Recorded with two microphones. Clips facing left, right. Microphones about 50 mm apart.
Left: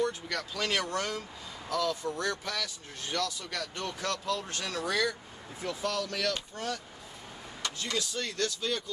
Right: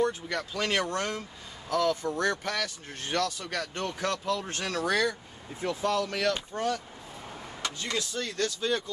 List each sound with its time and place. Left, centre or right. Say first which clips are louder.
0.0 s speech: right 3 dB; centre; by 5.0 s right
5.6 s speech: right 5 dB; right